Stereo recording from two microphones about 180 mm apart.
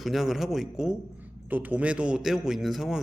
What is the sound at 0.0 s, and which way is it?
A man's voice, centre (ahead or behind).